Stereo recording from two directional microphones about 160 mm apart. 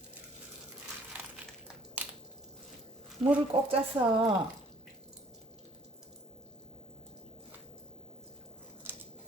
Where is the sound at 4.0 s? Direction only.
15° right (ahead or behind).